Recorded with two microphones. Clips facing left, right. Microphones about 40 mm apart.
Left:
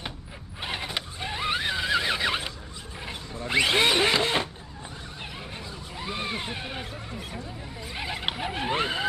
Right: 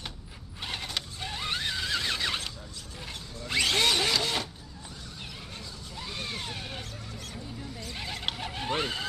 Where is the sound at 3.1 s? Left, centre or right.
Left.